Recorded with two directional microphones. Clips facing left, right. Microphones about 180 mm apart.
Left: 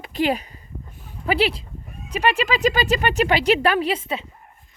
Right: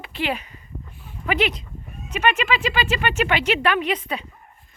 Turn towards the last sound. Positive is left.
turn(degrees=25)  # may be behind; listen again after turning